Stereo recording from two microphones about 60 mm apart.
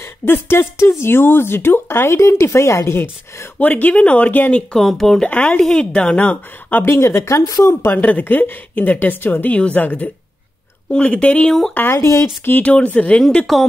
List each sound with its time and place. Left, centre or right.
0.0 s speech: left
3.5 s speech: left
4.7 s speech: centre
5.3 s speech: left
5.6 s a woman's voice: centre
6.1 s speech: left
6.8 s speech: left
7.9 s a woman's voice: left
10.9 s speech: centre
11.9 s speech: left
12.6 s speech: left
13.5 s speech: centre